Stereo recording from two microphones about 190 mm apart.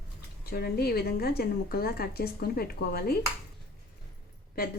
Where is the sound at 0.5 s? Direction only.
55° left (ahead or behind).